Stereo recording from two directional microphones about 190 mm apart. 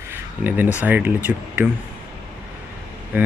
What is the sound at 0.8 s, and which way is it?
Speech, 10° right (ahead or behind).